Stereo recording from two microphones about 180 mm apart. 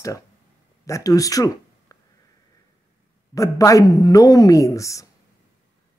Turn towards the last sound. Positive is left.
turn(degrees=15)  # may be behind; listen again after turning